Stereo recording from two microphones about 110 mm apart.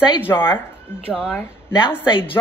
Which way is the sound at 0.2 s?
20° left (ahead or behind).